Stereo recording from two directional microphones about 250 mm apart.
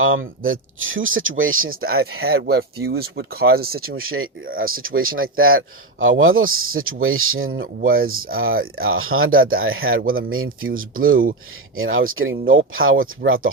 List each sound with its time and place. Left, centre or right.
0.0 s speech: right
2.4 s speech: right
3.8 s speech: right
4.4 s speech: right
4.7 s speech: right
7.6 s speech: right
8.7 s speech: right
9.3 s speech: right
9.6 s speech: right
10.0 s speech: right
10.2 s speech: right
10.7 s speech: right
11.8 s speech: right